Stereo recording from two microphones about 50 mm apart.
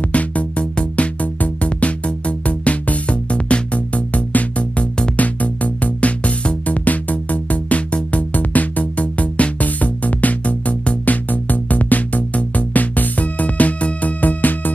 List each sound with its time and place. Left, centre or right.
0.1 s music: left